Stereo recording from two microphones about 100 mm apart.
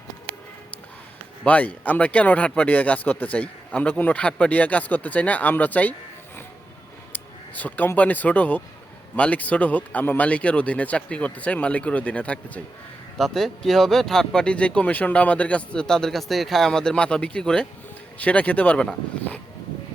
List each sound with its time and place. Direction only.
1.5 s speech: 15° left (ahead or behind)
7.1 s speech: 15° left (ahead or behind)
13.1 s speech: centre (ahead or behind)